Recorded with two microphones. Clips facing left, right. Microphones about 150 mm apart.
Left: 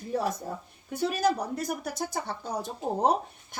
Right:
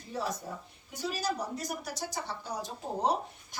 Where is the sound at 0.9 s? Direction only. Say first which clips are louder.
Left 8 dB; 55° left (ahead or behind).